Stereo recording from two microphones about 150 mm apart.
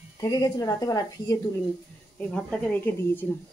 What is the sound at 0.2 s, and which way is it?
Speech, 25° left (ahead or behind).